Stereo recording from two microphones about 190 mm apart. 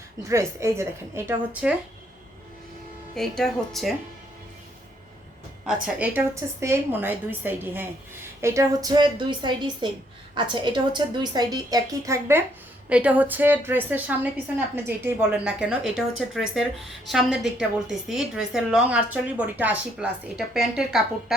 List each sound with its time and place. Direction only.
0.2 s a woman's voice: 15° right (ahead or behind)
3.2 s a woman's voice: centre (ahead or behind)
5.6 s a woman's voice: 5° right (ahead or behind)